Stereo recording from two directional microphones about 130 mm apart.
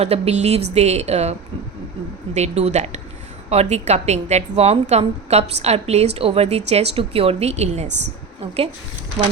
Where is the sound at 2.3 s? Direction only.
60° right (ahead or behind).